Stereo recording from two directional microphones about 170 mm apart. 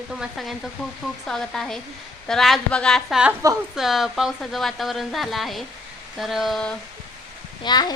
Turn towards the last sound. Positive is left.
turn(degrees=25)  # may be behind; listen again after turning